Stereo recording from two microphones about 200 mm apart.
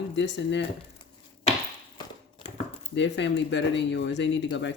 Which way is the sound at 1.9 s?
30° left (ahead or behind).